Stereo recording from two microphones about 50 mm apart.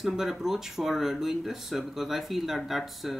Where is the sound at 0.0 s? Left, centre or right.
Centre.